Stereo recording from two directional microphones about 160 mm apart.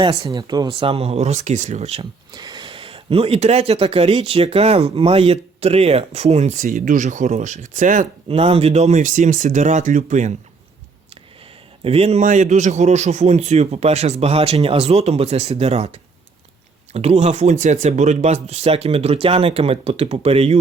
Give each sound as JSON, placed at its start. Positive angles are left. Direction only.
{"t": 0.0, "sound": "speech", "side_deg": -25}
{"t": 2.3, "sound": "speech", "side_deg": -25}
{"t": 6.7, "sound": "speech", "side_deg": -60}
{"t": 8.3, "sound": "speech", "side_deg": -40}
{"t": 11.8, "sound": "speech", "side_deg": -40}